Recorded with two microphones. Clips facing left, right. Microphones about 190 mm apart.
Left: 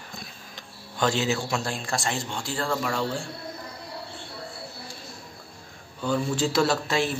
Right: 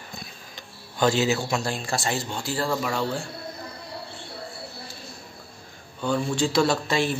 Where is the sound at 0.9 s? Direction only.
5° right (ahead or behind).